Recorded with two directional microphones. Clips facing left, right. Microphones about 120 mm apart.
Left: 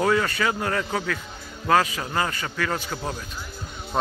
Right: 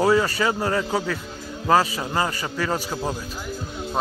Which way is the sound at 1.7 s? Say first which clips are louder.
Right 2 dB; 30° right (ahead or behind).